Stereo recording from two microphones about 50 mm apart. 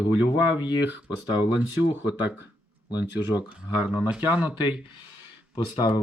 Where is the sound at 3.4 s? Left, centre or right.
Right.